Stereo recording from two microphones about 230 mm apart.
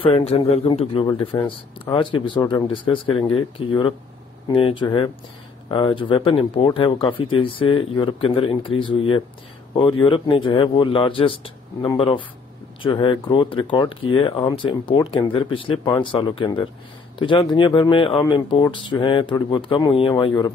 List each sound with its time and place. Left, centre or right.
0.0 s speech: left